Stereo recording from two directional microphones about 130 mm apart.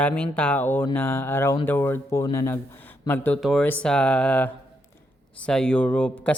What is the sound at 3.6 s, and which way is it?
Speech, 10° left (ahead or behind).